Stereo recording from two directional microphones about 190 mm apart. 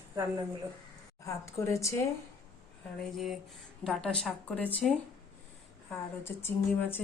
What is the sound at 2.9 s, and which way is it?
Speech, centre (ahead or behind).